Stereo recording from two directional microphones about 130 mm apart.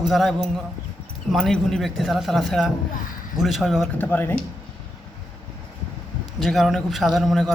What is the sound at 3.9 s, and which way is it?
Speech, 15° left (ahead or behind).